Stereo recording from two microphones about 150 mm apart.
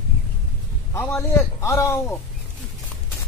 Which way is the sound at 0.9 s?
20° left (ahead or behind).